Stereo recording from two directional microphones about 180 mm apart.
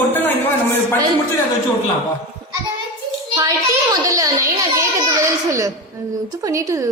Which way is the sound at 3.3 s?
20° right (ahead or behind).